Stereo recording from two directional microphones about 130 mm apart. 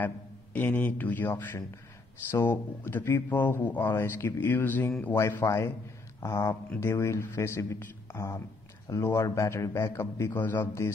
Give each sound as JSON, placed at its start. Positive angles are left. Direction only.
{"t": 0.0, "sound": "a man's voice", "side_deg": 15}